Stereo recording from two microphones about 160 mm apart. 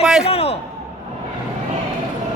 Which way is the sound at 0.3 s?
40° left (ahead or behind).